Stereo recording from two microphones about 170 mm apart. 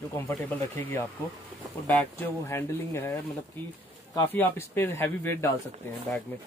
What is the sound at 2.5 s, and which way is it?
Speech, 15° left (ahead or behind).